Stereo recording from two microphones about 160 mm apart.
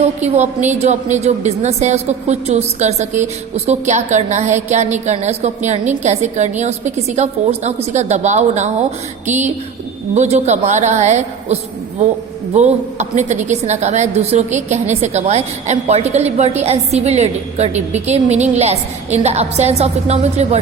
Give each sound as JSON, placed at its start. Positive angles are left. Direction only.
{"t": 0.0, "sound": "a woman's voice", "side_deg": -45}